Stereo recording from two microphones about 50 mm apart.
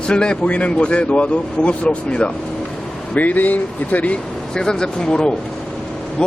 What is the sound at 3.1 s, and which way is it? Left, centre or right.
Speech, left.